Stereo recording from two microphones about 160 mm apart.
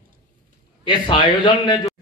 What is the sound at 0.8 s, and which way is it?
Speech, 30° left (ahead or behind).